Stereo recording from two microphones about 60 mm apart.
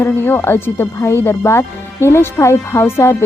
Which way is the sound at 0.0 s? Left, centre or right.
Left.